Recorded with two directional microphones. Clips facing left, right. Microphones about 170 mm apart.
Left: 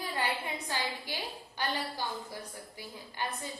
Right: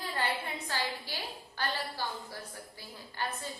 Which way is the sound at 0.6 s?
15° left (ahead or behind).